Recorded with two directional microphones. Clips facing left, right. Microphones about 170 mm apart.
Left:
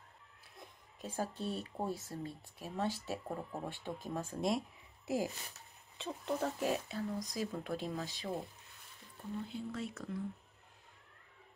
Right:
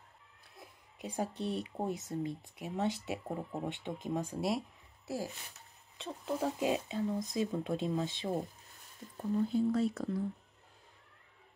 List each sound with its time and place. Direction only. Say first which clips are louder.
1.0 s speech: right 3 dB; 15° right (ahead or behind)
5.0 s speech: left 3 dB; 15° left (ahead or behind)
5.9 s speech: right 1 dB; centre (ahead or behind); by 8.3 s 25° right (ahead or behind)
9.1 s speech: right 11 dB; 40° right (ahead or behind)